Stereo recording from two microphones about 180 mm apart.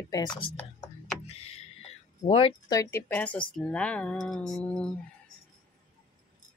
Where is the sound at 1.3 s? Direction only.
35° left (ahead or behind).